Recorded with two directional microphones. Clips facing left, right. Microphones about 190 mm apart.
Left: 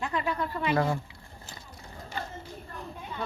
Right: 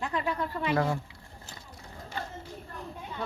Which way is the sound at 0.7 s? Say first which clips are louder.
Left 1 dB; 10° left (ahead or behind).